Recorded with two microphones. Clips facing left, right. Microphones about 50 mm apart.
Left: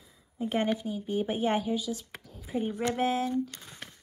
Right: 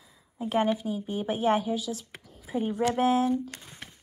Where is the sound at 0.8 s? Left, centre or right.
Right.